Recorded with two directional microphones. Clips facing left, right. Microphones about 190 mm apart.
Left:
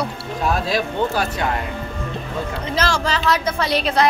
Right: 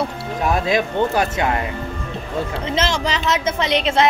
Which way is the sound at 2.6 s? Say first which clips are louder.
Left 1 dB; 25° right (ahead or behind).